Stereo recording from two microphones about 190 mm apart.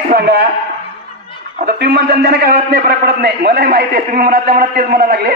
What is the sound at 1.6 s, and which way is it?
A man's voice, 55° right (ahead or behind).